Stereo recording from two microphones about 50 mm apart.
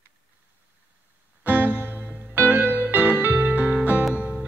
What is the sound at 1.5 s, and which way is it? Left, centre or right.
Music, right.